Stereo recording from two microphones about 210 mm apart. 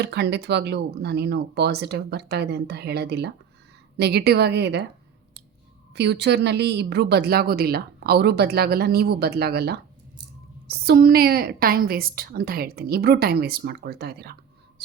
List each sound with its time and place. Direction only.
0.0 s a woman's voice: 50° right (ahead or behind)
5.9 s a woman's voice: 55° right (ahead or behind)
14.8 s whispering: 50° right (ahead or behind)